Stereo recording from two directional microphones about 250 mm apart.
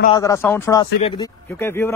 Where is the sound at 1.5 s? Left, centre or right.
Centre.